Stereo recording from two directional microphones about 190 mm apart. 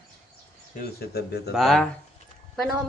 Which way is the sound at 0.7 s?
55° left (ahead or behind).